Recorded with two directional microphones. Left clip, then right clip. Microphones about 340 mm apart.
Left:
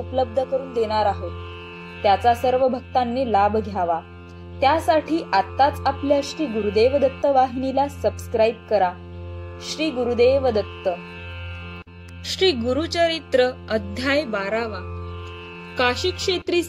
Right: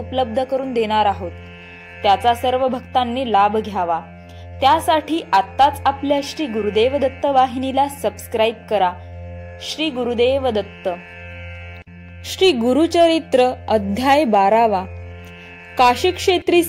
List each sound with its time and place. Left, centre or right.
0.4 s a woman's voice: centre
12.3 s a woman's voice: centre